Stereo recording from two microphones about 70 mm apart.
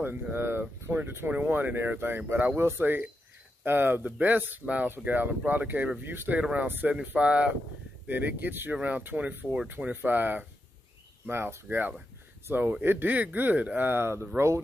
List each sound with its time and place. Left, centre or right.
0.0 s speech: right